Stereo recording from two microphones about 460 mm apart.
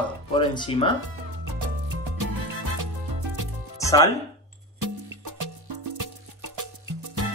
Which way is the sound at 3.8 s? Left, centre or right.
Centre.